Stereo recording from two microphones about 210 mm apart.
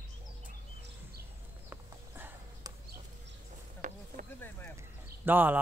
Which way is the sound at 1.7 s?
10° right (ahead or behind).